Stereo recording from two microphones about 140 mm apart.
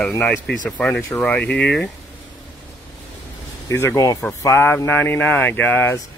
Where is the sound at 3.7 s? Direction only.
20° left (ahead or behind).